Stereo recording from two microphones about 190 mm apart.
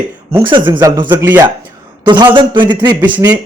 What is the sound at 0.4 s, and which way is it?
Speech, 25° right (ahead or behind).